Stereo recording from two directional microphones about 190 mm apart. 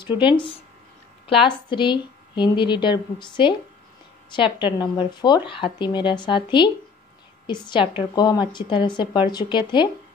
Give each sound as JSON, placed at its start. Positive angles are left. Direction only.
{"t": 0.0, "sound": "speech", "side_deg": 25}